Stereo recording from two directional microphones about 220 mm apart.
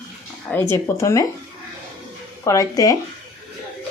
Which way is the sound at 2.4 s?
15° left (ahead or behind).